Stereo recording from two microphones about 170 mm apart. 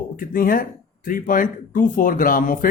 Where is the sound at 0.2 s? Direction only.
55° left (ahead or behind).